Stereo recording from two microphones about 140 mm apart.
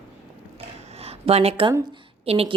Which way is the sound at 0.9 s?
45° right (ahead or behind).